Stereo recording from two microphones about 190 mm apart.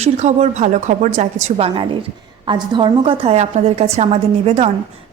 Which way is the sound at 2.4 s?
25° right (ahead or behind).